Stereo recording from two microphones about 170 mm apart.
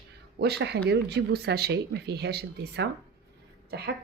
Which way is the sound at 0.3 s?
75° right (ahead or behind).